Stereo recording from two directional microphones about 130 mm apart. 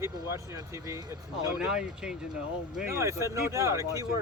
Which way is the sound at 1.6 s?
5° right (ahead or behind).